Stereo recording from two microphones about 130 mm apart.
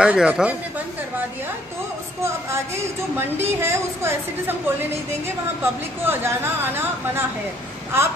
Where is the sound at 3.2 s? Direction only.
20° right (ahead or behind).